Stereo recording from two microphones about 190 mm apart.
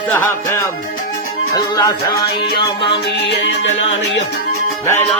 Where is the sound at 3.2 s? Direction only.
65° left (ahead or behind).